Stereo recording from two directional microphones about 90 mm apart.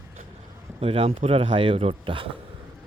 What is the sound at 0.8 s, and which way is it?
Speech, 90° right.